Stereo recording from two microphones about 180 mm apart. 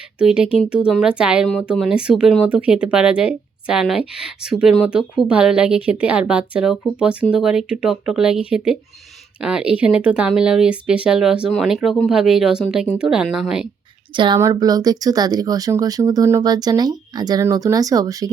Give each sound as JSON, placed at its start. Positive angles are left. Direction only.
{"t": 0.2, "sound": "speech", "side_deg": -5}
{"t": 14.2, "sound": "speech", "side_deg": -20}